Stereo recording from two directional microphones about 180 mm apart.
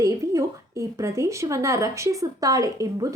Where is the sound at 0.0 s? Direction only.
15° right (ahead or behind).